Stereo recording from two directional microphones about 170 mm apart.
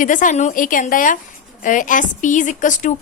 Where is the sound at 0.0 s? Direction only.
50° left (ahead or behind).